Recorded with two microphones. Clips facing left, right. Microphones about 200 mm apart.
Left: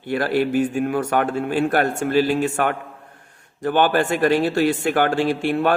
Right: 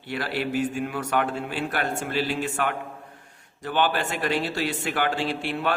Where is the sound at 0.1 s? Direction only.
50° left (ahead or behind).